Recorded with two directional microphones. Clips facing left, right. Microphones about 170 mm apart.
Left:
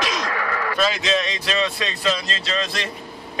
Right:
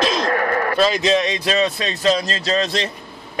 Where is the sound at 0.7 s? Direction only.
35° right (ahead or behind).